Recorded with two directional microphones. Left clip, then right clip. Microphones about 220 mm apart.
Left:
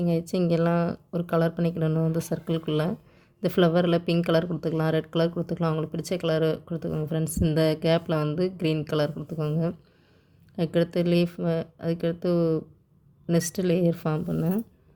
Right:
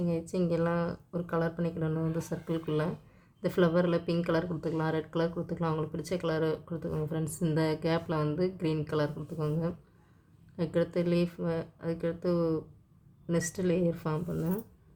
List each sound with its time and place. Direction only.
0.0 s speech: 35° left (ahead or behind)